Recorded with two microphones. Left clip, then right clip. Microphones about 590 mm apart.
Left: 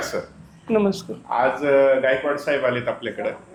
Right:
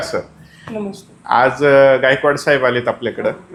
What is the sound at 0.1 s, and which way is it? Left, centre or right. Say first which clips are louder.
Speech: right 6 dB; right.